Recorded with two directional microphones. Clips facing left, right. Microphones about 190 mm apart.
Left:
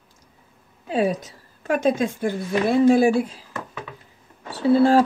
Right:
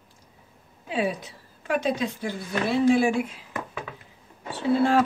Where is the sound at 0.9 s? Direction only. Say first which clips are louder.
Left 5 dB; 40° left (ahead or behind).